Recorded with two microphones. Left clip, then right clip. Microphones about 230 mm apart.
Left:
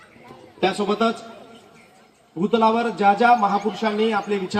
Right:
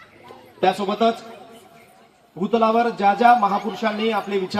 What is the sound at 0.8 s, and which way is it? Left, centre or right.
Speech, left.